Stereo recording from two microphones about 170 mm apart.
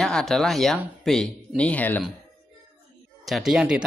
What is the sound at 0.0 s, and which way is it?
Speech, centre (ahead or behind).